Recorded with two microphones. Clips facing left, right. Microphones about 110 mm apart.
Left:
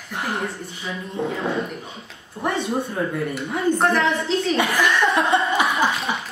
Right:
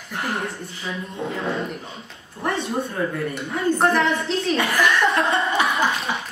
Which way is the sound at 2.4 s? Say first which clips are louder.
Left 1 dB; 20° left (ahead or behind).